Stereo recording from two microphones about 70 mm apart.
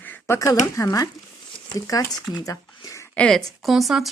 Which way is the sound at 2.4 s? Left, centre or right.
Left.